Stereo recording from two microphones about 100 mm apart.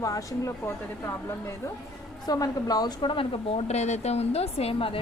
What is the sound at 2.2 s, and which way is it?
A woman's voice, 35° left (ahead or behind).